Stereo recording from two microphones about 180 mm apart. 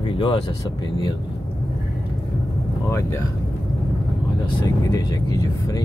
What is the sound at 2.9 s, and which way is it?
Speech, 15° left (ahead or behind).